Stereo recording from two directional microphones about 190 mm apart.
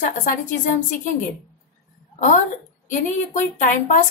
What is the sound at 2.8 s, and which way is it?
A woman's voice, 40° left (ahead or behind).